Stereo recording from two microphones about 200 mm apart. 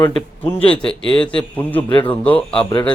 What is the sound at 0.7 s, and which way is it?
Speech, 5° left (ahead or behind).